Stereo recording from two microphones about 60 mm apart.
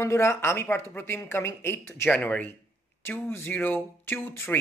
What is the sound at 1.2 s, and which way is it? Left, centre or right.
Speech, left.